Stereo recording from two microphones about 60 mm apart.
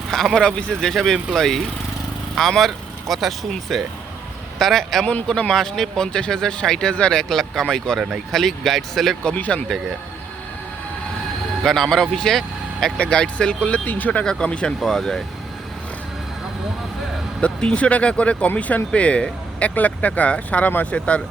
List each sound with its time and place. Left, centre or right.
0.1 s speech: centre
9.2 s speech: left
11.6 s speech: centre
13.0 s speech: centre
14.3 s speech: centre
14.8 s speech: centre
17.4 s speech: centre